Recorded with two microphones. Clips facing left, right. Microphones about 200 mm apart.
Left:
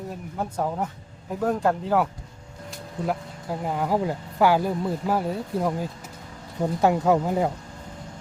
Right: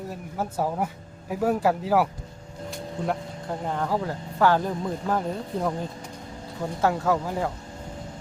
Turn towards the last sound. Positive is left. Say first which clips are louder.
# left 4 dB
turn(degrees=20)  # may be behind; listen again after turning